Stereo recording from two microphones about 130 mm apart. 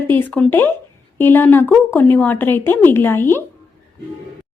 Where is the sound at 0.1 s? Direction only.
15° left (ahead or behind).